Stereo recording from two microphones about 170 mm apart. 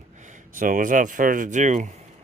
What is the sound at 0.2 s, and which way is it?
Speech, 45° right (ahead or behind).